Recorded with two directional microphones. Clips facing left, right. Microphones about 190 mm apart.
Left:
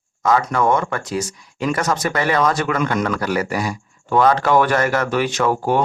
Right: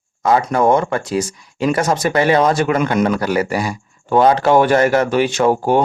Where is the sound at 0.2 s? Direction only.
30° right (ahead or behind).